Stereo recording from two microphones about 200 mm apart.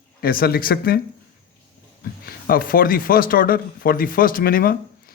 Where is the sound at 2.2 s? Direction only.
45° left (ahead or behind).